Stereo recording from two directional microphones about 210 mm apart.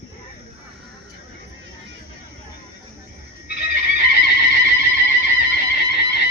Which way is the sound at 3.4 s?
50° left (ahead or behind).